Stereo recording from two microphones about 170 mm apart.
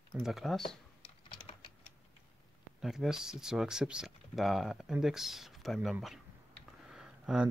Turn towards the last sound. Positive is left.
turn(degrees=-5)  # may be behind; listen again after turning